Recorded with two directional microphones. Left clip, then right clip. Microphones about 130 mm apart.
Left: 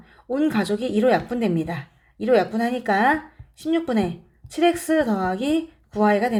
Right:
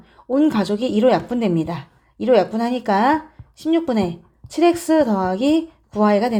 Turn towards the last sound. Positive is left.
turn(degrees=-35)  # may be behind; listen again after turning